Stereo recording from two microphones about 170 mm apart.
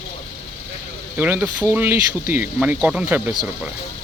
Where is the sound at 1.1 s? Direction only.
10° right (ahead or behind).